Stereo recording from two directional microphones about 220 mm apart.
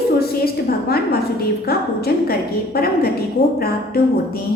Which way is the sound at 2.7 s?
45° left (ahead or behind).